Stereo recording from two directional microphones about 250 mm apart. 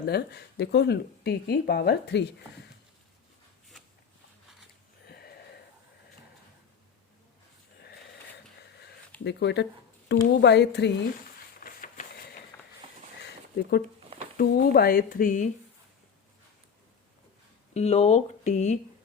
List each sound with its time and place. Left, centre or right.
0.0 s speech: left
5.0 s a sound: left
9.2 s a woman's voice: left
11.6 s mechanisms: left
13.6 s speech: left
17.7 s speech: left